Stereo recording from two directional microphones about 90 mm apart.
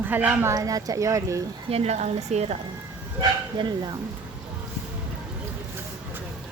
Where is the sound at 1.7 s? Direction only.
90° right.